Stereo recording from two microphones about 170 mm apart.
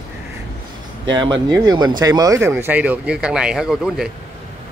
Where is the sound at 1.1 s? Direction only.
25° right (ahead or behind); by 4.1 s centre (ahead or behind).